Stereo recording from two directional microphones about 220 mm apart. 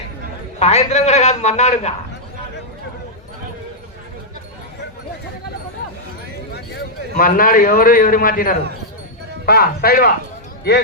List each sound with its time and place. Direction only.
0.6 s a man's voice: 30° left (ahead or behind)
6.5 s a man's voice: 45° left (ahead or behind)